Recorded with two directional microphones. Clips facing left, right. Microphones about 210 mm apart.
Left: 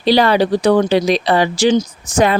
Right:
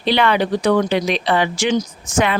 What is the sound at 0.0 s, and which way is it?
Speech, 35° left (ahead or behind).